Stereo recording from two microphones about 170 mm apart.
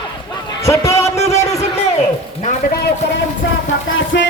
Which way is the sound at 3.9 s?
90° left.